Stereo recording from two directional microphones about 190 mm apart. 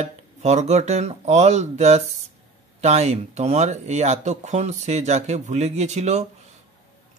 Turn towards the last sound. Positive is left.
turn(degrees=-35)  # may be behind; listen again after turning